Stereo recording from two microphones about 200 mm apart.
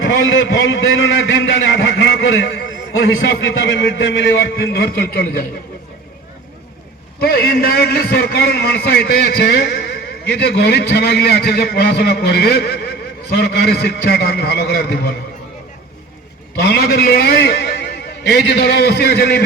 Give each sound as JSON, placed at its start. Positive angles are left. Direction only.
{"t": 0.0, "sound": "a man's voice", "side_deg": 70}
{"t": 7.2, "sound": "a man's voice", "side_deg": 50}
{"t": 16.6, "sound": "a man's voice", "side_deg": 55}